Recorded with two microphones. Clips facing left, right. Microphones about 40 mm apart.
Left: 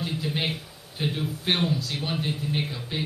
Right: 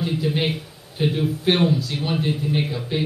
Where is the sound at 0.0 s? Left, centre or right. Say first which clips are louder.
Right 6 dB; centre.